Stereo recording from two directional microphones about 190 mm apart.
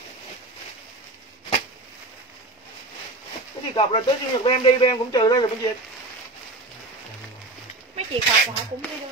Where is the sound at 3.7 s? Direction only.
30° left (ahead or behind).